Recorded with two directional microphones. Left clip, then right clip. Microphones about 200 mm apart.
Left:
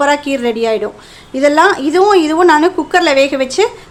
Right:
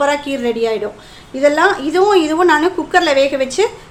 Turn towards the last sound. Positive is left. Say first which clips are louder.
# left 2 dB
turn(degrees=30)  # may be behind; listen again after turning